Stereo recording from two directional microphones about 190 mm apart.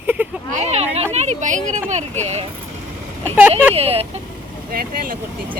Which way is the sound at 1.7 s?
40° right (ahead or behind).